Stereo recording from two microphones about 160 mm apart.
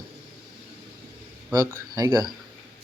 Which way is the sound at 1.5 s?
20° right (ahead or behind).